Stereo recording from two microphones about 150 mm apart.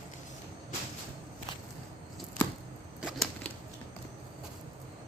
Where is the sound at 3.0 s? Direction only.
Centre (ahead or behind).